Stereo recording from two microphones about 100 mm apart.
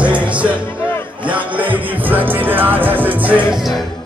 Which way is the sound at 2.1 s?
20° right (ahead or behind).